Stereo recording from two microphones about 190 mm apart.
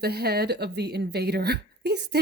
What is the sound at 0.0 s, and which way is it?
Speech, 55° right (ahead or behind).